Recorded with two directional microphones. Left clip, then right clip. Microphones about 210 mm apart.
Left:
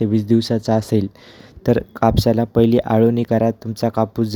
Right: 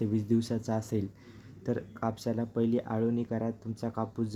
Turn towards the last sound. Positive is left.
turn(degrees=30)  # may be behind; listen again after turning